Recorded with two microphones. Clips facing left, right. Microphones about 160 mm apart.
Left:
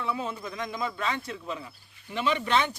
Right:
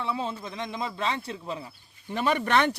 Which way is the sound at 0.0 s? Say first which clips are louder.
Right 1 dB; 30° right (ahead or behind).